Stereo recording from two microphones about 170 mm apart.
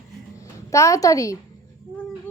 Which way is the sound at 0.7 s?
20° left (ahead or behind).